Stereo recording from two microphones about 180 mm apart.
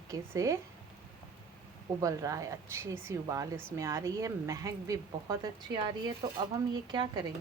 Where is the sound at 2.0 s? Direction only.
20° right (ahead or behind).